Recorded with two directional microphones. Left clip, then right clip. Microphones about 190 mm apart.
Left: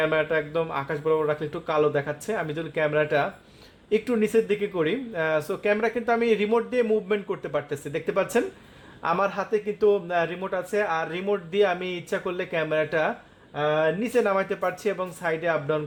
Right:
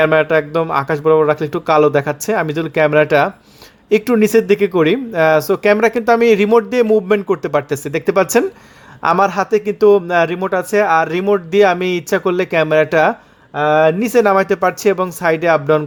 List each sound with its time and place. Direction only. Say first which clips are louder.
0.0 s speech: right 11 dB; 35° right (ahead or behind)